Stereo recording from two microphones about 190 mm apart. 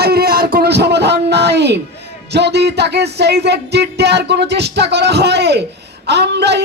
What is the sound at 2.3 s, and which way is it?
Speech, 60° right (ahead or behind).